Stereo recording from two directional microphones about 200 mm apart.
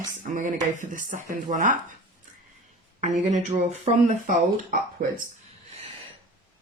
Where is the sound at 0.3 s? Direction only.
40° right (ahead or behind).